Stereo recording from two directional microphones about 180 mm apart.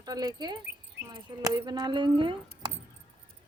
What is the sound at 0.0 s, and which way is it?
Speech, 20° right (ahead or behind).